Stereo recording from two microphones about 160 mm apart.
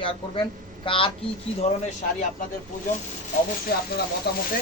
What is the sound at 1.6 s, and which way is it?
Speech, 45° left (ahead or behind).